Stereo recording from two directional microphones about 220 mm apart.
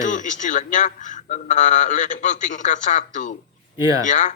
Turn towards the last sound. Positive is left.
turn(degrees=35)  # may be behind; listen again after turning